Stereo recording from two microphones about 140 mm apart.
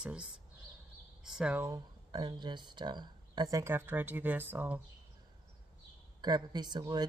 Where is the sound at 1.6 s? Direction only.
25° right (ahead or behind).